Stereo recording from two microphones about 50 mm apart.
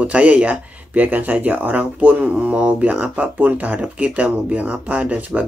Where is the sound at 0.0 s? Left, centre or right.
Right.